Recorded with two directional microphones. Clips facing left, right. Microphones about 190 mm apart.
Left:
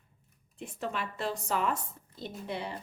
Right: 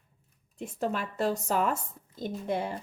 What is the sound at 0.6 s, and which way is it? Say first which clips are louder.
A woman's voice: right 4 dB; 40° right (ahead or behind).